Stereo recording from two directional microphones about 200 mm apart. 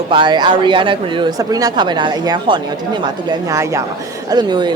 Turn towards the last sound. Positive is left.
turn(degrees=-20)  # may be behind; listen again after turning